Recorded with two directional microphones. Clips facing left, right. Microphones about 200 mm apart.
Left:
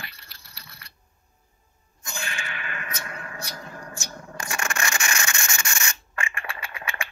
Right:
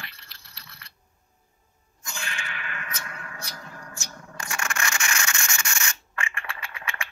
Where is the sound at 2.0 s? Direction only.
20° left (ahead or behind).